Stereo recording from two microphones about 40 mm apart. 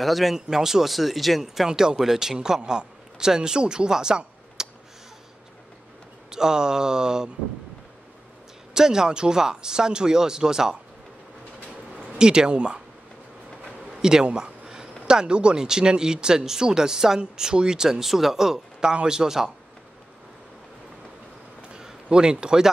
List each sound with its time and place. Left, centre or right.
0.0 s speech: centre
0.5 s speech: centre
1.7 s a man's voice: centre
4.6 s a sound: centre
6.3 s speech: centre
8.7 s speech: centre
12.2 s a man's voice: right
13.8 s a sound: centre
15.0 s speech: right
21.7 s a sound: centre